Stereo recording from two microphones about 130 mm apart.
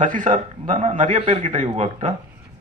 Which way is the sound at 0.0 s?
80° right.